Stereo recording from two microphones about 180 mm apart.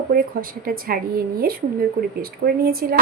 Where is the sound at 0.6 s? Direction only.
55° right (ahead or behind).